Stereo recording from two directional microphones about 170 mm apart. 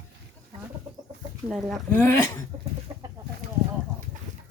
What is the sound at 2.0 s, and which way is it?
Speech, 10° left (ahead or behind).